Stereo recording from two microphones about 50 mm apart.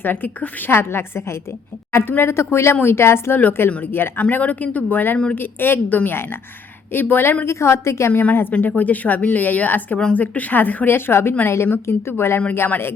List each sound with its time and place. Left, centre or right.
0.0 s speech: left
0.7 s a woman's voice: left
3.3 s a woman's voice: left
7.4 s a woman's voice: left
8.1 s speech: left
10.9 s a woman's voice: left